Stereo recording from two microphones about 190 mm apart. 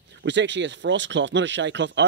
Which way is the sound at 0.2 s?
70° right (ahead or behind).